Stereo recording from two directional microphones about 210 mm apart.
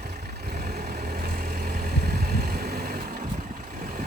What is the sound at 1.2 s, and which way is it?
Vehicle, 45° right (ahead or behind).